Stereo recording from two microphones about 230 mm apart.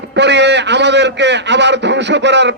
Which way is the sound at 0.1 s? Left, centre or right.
Right.